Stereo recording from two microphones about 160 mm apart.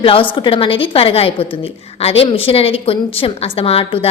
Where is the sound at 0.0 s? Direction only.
30° left (ahead or behind).